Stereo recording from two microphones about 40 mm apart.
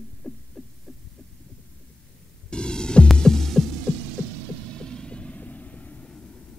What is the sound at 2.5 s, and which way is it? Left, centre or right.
Throbbing, left.